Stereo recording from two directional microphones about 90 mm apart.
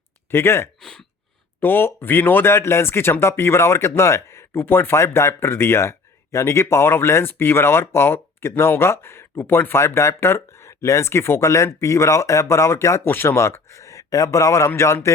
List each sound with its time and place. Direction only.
0.3 s speech: 25° left (ahead or behind)
0.8 s speech: 5° left (ahead or behind)
1.6 s speech: 25° left (ahead or behind)